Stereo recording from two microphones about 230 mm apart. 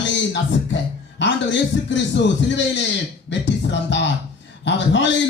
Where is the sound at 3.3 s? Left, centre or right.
Left.